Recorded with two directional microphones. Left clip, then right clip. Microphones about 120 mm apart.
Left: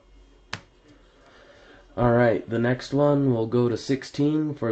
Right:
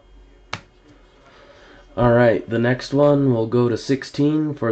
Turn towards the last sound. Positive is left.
turn(degrees=0)  # may be behind; listen again after turning